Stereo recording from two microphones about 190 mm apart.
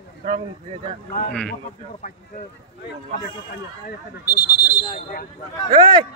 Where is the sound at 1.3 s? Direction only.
5° left (ahead or behind).